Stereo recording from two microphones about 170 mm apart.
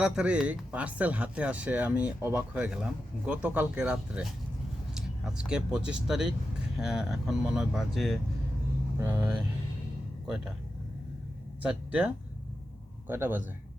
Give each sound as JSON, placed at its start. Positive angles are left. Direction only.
{"t": 0.0, "sound": "speech", "side_deg": -5}
{"t": 9.0, "sound": "speech", "side_deg": -15}
{"t": 10.2, "sound": "speech", "side_deg": -5}
{"t": 11.6, "sound": "speech", "side_deg": -10}